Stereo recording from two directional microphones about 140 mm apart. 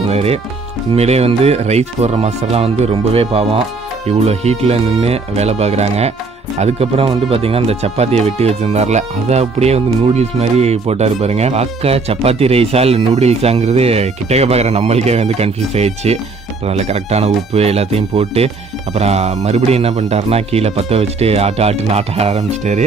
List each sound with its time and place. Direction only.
0.1 s music: 45° right (ahead or behind)
0.9 s speech: 50° right (ahead or behind)